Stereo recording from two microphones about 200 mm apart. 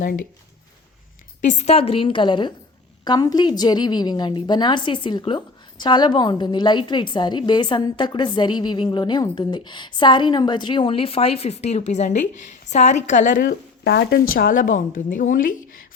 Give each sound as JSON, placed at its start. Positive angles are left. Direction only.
{"t": 1.4, "sound": "a woman's voice", "side_deg": 35}
{"t": 14.3, "sound": "a woman's voice", "side_deg": 45}